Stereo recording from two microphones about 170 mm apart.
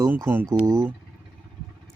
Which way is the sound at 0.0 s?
15° right (ahead or behind).